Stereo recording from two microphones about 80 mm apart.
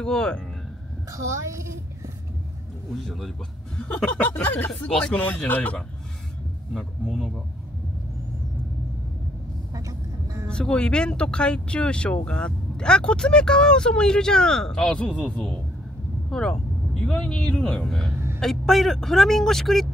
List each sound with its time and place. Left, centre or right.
0.0 s speech: centre
1.1 s a child's voice: right
3.0 s speech: centre
4.2 s speech: left
4.6 s speech: centre
6.7 s speech: centre
9.8 s vehicle: right
10.5 s a man's voice: centre